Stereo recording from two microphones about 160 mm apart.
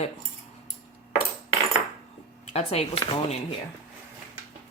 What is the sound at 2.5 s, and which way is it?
Speech, 40° left (ahead or behind).